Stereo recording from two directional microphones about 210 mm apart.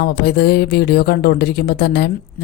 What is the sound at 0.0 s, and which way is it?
Speech, 50° left (ahead or behind).